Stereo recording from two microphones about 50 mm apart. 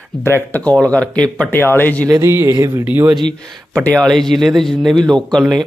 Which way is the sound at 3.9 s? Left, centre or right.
Centre.